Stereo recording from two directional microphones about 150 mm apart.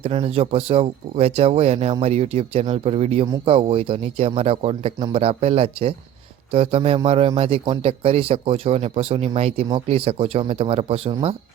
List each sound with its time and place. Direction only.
0.0 s speech: 40° right (ahead or behind)